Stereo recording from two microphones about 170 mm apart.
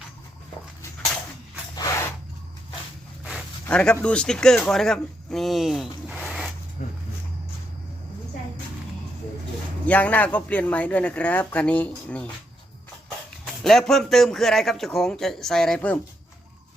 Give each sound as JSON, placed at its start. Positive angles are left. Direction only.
{"t": 1.7, "sound": "a sound", "side_deg": 20}
{"t": 3.7, "sound": "speech", "side_deg": 5}
{"t": 9.8, "sound": "speech", "side_deg": 10}
{"t": 13.4, "sound": "a man's voice", "side_deg": 0}